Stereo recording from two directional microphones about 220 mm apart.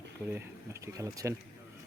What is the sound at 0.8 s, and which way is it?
Speech, 15° right (ahead or behind).